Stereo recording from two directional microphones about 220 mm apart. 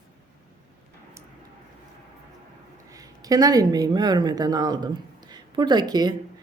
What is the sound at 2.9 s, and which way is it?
Speech, 15° right (ahead or behind).